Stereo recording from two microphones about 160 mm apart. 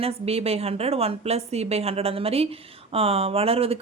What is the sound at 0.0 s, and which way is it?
Speech, 40° right (ahead or behind).